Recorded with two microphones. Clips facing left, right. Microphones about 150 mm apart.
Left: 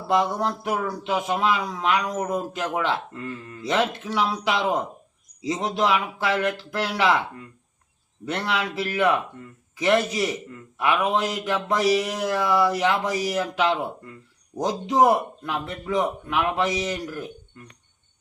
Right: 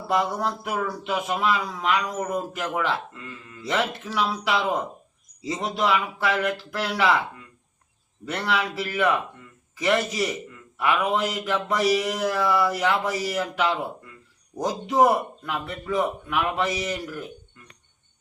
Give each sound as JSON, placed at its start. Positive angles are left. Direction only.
{"t": 0.1, "sound": "speech", "side_deg": 20}
{"t": 8.2, "sound": "speech", "side_deg": 20}